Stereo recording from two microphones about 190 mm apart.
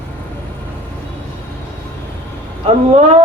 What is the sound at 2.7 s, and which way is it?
Speech, 30° right (ahead or behind).